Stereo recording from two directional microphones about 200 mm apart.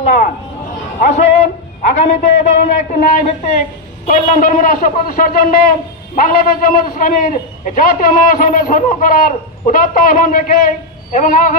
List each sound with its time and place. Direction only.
1.0 s a man's voice: 35° left (ahead or behind)